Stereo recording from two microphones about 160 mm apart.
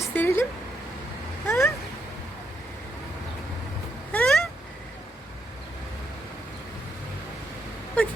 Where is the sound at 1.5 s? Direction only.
15° left (ahead or behind).